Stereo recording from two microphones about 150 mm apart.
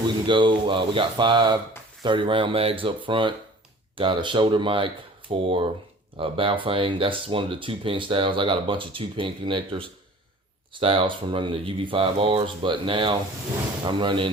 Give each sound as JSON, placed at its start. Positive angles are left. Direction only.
{"t": 0.3, "sound": "speech", "side_deg": -30}